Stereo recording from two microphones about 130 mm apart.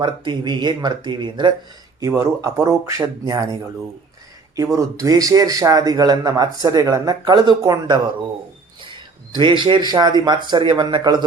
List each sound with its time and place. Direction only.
0.0 s speech: 35° right (ahead or behind)
2.0 s a man's voice: 25° right (ahead or behind)
9.3 s speech: 35° right (ahead or behind)